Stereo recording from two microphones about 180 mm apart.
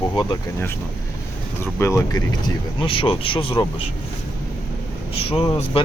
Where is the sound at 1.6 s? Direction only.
15° left (ahead or behind).